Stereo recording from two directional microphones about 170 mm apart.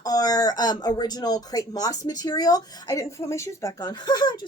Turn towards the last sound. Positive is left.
turn(degrees=25)  # may be behind; listen again after turning